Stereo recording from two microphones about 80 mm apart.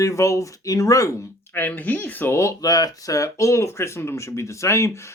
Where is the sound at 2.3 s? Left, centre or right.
Left.